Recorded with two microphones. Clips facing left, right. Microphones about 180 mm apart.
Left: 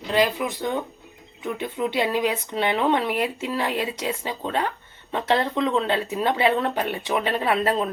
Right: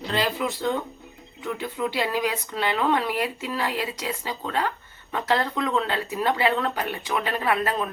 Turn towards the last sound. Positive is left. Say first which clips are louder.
# left 2 dB
turn(degrees=25)  # may be behind; listen again after turning